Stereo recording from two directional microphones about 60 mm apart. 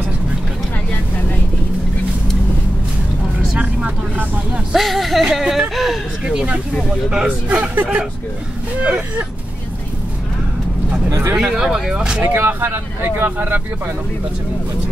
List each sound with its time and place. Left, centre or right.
3.5 s vehicle: right
4.7 s a sound: centre
7.1 s a man's voice: centre
11.1 s speech: right
11.3 s speech: centre
12.2 s speech: right